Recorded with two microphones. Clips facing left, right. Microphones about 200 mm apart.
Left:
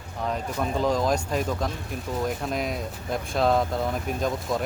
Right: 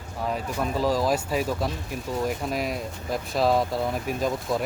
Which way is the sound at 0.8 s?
5° right (ahead or behind).